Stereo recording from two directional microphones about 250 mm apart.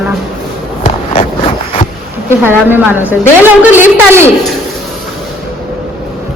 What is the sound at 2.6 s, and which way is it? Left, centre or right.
Speech, centre.